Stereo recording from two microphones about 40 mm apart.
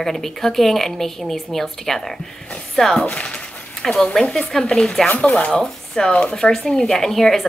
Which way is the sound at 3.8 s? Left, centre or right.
Centre.